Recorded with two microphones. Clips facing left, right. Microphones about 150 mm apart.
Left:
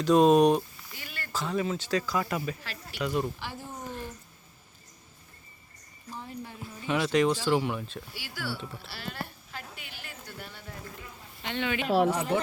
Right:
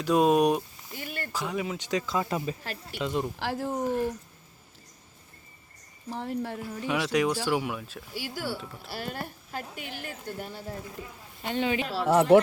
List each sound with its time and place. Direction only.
0.0 s speech: 10° right (ahead or behind)
0.9 s a sound: 50° right (ahead or behind)
1.3 s speech: 15° right (ahead or behind)
3.3 s speech: 90° right
6.1 s speech: 70° right (ahead or behind)
6.8 s speech: 5° right (ahead or behind)
8.1 s speech: 45° right (ahead or behind)
8.5 s speech: centre (ahead or behind)
8.9 s a woman's voice: 45° right (ahead or behind)
12.0 s speech: 70° right (ahead or behind)